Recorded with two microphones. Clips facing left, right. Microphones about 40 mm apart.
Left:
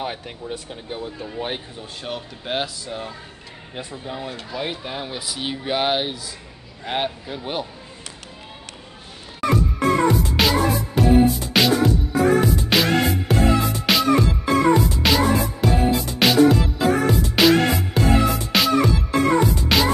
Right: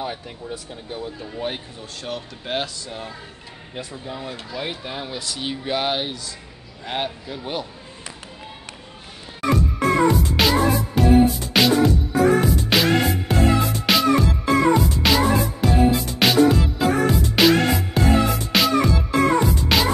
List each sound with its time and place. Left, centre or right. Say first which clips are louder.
0.0 s speech: left 1 dB; left
2.0 s speech: even; centre
10.0 s music: even; centre